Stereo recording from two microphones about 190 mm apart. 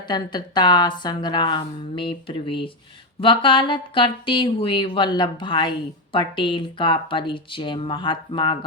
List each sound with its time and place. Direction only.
0.1 s speech: 25° left (ahead or behind)